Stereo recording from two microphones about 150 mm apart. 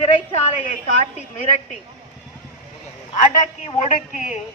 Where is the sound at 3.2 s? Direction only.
50° left (ahead or behind).